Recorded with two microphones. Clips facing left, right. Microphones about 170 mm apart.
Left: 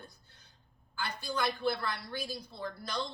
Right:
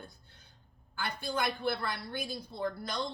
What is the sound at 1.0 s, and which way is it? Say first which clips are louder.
A woman's voice: right 1 dB; 55° right (ahead or behind).